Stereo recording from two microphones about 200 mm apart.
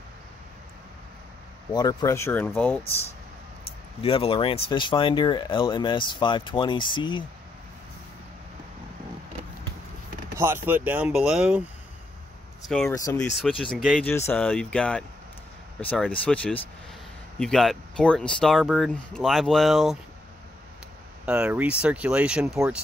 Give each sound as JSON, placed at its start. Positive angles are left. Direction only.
{"t": 1.7, "sound": "speech", "side_deg": 20}
{"t": 4.0, "sound": "speech", "side_deg": 25}
{"t": 10.3, "sound": "speech", "side_deg": -10}
{"t": 12.6, "sound": "speech", "side_deg": 5}
{"t": 12.9, "sound": "speech", "side_deg": 15}
{"t": 13.2, "sound": "speech", "side_deg": 0}
{"t": 14.0, "sound": "speech", "side_deg": 10}
{"t": 21.3, "sound": "speech", "side_deg": -5}